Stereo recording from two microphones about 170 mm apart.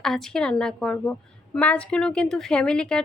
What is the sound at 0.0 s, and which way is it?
A woman's voice, 5° left (ahead or behind).